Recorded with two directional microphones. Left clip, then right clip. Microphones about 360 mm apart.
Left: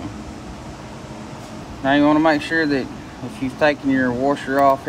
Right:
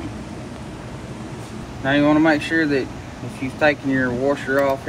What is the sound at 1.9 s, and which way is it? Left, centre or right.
Speech, left.